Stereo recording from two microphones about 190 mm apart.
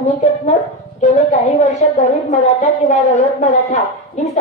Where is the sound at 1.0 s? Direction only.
35° left (ahead or behind).